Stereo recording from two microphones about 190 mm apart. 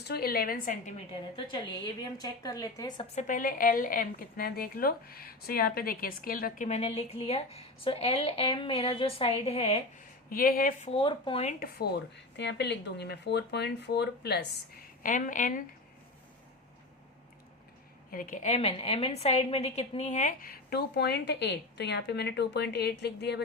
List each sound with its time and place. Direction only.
0.0 s a woman's voice: 55° left (ahead or behind)
1.5 s a woman's voice: 20° left (ahead or behind)
3.2 s a woman's voice: 45° left (ahead or behind)
6.7 s speech: 35° left (ahead or behind)
10.2 s a woman's voice: 50° left (ahead or behind)
10.8 s speech: 30° left (ahead or behind)
11.6 s speech: 55° left (ahead or behind)
15.0 s a woman's voice: 45° left (ahead or behind)
18.1 s a woman's voice: 45° left (ahead or behind); by 23.4 s 60° left (ahead or behind)